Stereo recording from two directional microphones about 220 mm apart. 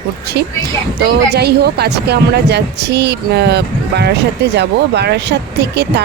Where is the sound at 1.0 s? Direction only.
50° right (ahead or behind).